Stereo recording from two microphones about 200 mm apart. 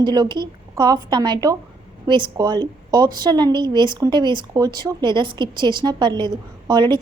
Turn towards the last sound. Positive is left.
turn(degrees=-20)  # may be behind; listen again after turning